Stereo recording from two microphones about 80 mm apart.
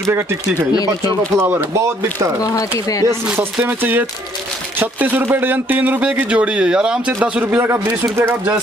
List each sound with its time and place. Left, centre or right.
1.3 s speech: right
2.4 s speech: left
3.6 s speech: right
8.0 s speech: right